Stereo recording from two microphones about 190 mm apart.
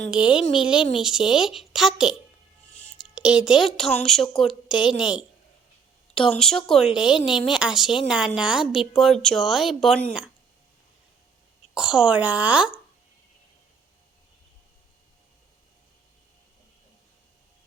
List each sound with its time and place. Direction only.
0.1 s a woman's voice: 5° right (ahead or behind)
3.2 s a woman's voice: 5° right (ahead or behind)
11.7 s a woman's voice: 5° right (ahead or behind)